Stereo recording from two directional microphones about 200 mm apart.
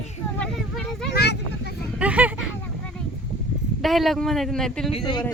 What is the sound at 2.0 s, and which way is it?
Speech, 5° right (ahead or behind).